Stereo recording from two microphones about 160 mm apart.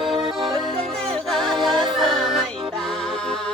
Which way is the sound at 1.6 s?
Centre (ahead or behind).